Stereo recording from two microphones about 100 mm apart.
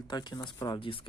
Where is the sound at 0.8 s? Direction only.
60° left (ahead or behind).